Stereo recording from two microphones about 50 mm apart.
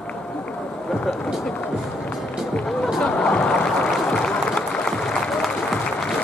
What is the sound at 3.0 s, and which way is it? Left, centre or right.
Boat, left.